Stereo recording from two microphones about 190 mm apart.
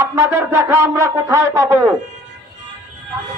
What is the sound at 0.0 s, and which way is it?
A man's voice, 15° right (ahead or behind).